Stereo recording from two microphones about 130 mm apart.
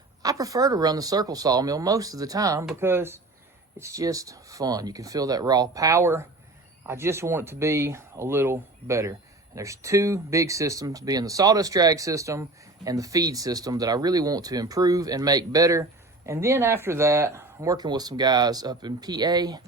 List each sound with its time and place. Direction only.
0.2 s speech: 25° right (ahead or behind)